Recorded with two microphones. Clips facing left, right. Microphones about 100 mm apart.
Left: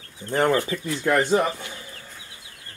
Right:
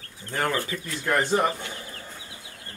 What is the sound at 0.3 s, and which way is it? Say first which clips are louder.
Speech: left 6 dB; 25° left (ahead or behind).